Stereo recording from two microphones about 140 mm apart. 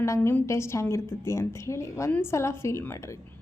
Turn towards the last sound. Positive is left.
turn(degrees=20)  # may be behind; listen again after turning